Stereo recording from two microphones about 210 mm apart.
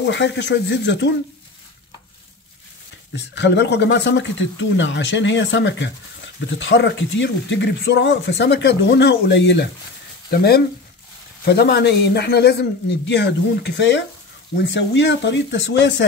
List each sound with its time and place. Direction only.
0.0 s speech: 55° left (ahead or behind)
3.1 s a man's voice: 55° left (ahead or behind)